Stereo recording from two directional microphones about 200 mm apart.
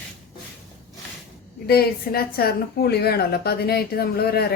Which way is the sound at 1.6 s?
50° left (ahead or behind).